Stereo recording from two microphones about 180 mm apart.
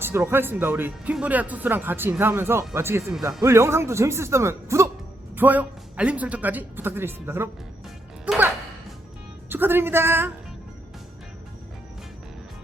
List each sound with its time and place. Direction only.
0.0 s speech: 15° right (ahead or behind)
8.2 s music: 10° right (ahead or behind)
9.5 s speech: 10° right (ahead or behind)